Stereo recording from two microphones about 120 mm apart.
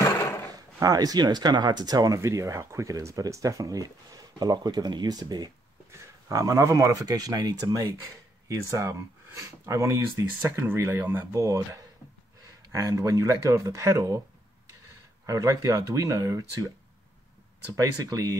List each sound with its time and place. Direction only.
0.0 s a sound: 25° left (ahead or behind)
0.7 s speech: 30° right (ahead or behind)
15.2 s speech: 30° right (ahead or behind)
17.7 s speech: 25° right (ahead or behind)